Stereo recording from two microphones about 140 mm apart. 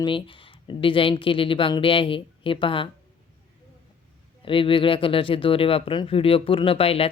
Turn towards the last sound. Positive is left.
turn(degrees=45)  # may be behind; listen again after turning